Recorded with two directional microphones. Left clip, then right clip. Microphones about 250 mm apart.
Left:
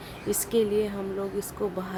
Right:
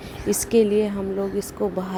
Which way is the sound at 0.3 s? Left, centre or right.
Centre.